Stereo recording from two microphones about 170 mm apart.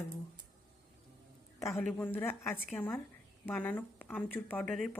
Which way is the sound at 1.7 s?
5° left (ahead or behind).